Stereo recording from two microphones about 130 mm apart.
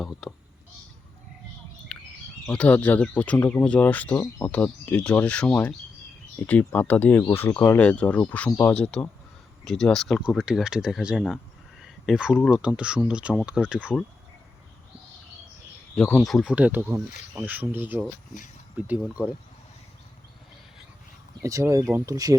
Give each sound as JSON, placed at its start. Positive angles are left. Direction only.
{"t": 0.0, "sound": "speech", "side_deg": 0}
{"t": 1.9, "sound": "bird", "side_deg": 5}
{"t": 2.5, "sound": "speech", "side_deg": 10}
{"t": 11.8, "sound": "a sound", "side_deg": -5}
{"t": 12.5, "sound": "speech", "side_deg": -5}
{"t": 16.0, "sound": "speech", "side_deg": 5}
{"t": 21.4, "sound": "speech", "side_deg": -25}